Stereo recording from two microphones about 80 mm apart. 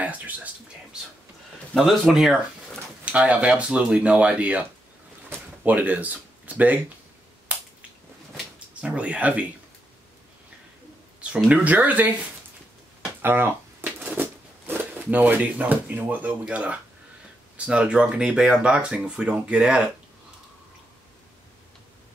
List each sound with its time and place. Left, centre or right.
0.0 s whispering: centre
1.8 s speech: centre
3.1 s speech: centre
5.3 s a sound: centre
7.5 s finger snapping: centre
8.8 s speech: centre
11.1 s speech: centre
13.2 s a sound: right
17.6 s speech: centre